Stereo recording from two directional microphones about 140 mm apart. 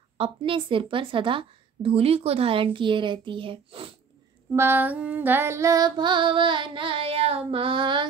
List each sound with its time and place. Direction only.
0.2 s a woman's voice: 40° right (ahead or behind)
4.5 s a woman's voice: 20° right (ahead or behind); by 8.1 s 35° right (ahead or behind)